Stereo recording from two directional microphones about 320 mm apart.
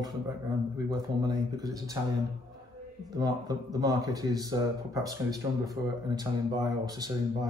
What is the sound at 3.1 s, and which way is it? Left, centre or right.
Speech, centre.